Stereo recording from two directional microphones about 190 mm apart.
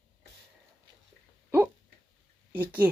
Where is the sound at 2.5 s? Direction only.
10° right (ahead or behind).